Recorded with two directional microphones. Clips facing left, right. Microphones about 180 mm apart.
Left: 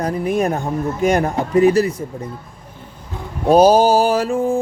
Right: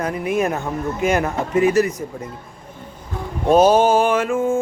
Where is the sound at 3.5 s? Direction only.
35° left (ahead or behind).